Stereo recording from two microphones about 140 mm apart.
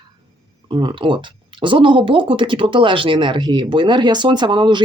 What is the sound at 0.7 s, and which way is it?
Speech, 35° right (ahead or behind).